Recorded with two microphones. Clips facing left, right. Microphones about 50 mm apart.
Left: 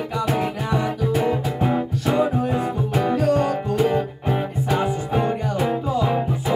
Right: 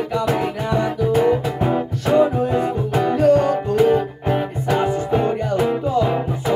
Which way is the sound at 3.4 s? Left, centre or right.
Centre.